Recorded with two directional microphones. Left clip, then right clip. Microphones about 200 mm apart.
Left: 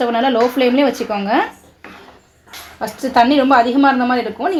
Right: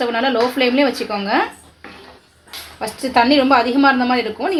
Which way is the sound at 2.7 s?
15° left (ahead or behind).